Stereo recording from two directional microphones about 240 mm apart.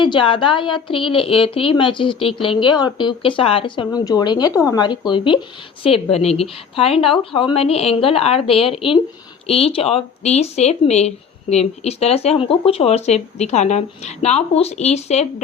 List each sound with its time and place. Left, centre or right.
0.0 s speech: left